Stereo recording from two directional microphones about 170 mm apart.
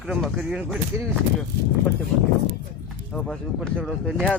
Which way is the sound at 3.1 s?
5° left (ahead or behind).